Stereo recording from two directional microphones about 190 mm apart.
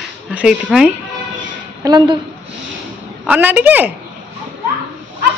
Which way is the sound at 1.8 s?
20° right (ahead or behind).